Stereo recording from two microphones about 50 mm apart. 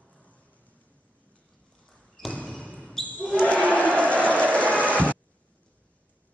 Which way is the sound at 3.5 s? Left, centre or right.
Left.